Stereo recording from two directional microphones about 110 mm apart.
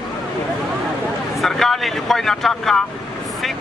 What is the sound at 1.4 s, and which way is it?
Speech, centre (ahead or behind).